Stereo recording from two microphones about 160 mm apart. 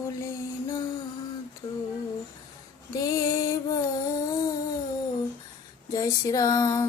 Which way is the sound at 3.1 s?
20° left (ahead or behind).